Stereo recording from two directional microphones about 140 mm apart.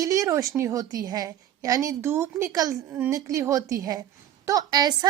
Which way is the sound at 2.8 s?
10° right (ahead or behind).